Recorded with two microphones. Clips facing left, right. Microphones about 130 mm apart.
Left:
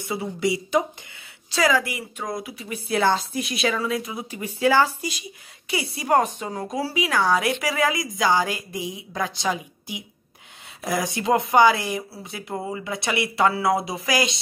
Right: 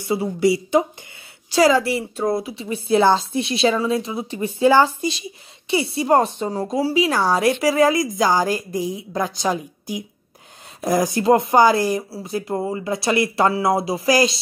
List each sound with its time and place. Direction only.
0.1 s a woman's voice: 30° right (ahead or behind)